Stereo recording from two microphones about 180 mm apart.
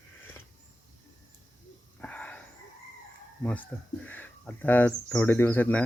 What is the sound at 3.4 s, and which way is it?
Speech, 5° left (ahead or behind).